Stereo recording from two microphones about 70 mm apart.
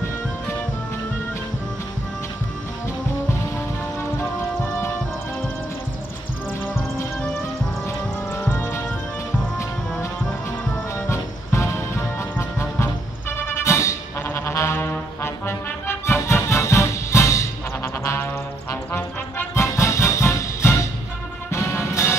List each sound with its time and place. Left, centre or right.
8.4 s music: left
11.1 s music: left
13.4 s brass instrument: left
18.0 s music: left